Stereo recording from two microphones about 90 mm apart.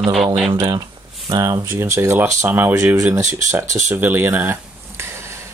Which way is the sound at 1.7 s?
30° right (ahead or behind).